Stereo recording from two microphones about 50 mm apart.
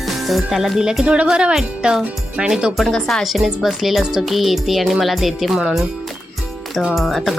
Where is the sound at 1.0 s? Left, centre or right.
Right.